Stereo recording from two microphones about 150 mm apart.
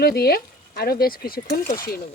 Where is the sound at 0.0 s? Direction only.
90° left.